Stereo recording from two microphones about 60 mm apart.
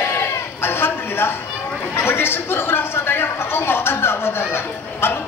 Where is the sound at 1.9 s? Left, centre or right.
Left.